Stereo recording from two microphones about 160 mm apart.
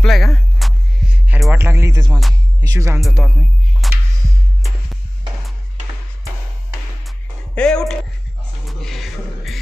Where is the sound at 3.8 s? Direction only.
Centre (ahead or behind).